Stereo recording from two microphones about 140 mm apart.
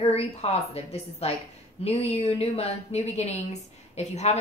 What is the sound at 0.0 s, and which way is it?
A woman's voice, 45° left (ahead or behind).